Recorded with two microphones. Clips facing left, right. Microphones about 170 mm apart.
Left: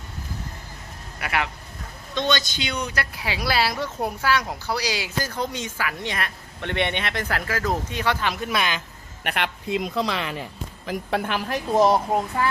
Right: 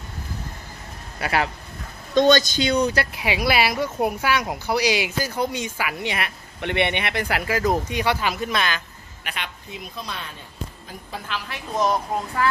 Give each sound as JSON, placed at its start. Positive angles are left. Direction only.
{"t": 1.2, "sound": "speech", "side_deg": -35}
{"t": 2.1, "sound": "speech", "side_deg": -45}
{"t": 8.4, "sound": "speech", "side_deg": 15}
{"t": 9.2, "sound": "a man's voice", "side_deg": 65}
{"t": 11.7, "sound": "speech", "side_deg": 30}